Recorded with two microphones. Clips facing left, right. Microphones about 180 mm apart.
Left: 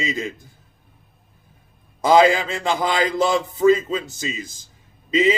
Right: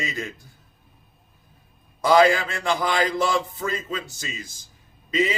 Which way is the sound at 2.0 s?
20° left (ahead or behind).